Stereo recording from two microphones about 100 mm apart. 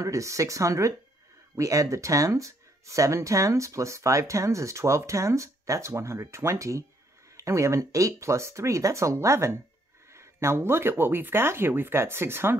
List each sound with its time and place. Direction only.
0.0 s speech: 30° right (ahead or behind)